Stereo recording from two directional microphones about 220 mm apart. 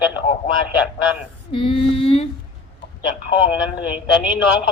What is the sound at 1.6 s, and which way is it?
Female singing, 25° left (ahead or behind).